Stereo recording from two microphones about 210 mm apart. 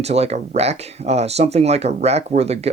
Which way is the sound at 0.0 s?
30° right (ahead or behind).